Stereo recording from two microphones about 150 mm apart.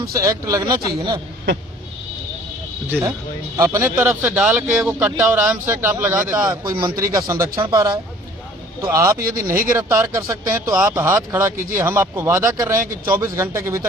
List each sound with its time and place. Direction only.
0.1 s speech: 20° right (ahead or behind)
3.6 s speech: 20° right (ahead or behind)